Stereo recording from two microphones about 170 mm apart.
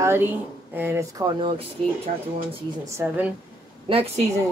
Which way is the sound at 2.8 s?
15° right (ahead or behind).